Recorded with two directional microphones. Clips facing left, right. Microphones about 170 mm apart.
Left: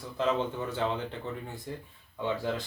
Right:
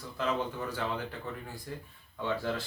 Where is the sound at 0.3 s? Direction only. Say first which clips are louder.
Left 3 dB; 25° left (ahead or behind).